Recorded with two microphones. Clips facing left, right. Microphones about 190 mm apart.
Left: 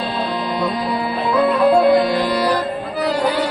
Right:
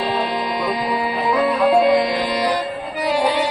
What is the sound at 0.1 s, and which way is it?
Music, 15° right (ahead or behind).